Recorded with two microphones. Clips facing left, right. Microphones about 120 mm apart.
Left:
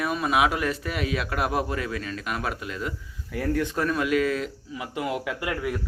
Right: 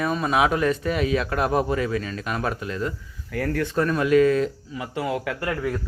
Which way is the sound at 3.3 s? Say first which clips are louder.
Right 1 dB; 15° left (ahead or behind).